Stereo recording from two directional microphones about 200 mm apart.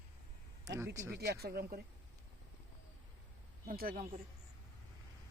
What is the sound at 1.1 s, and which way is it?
Speech, 50° right (ahead or behind).